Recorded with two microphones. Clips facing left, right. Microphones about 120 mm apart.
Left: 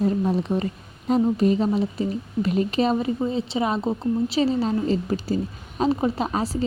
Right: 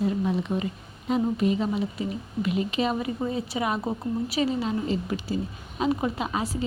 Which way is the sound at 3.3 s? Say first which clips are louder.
Left 4 dB; 25° left (ahead or behind).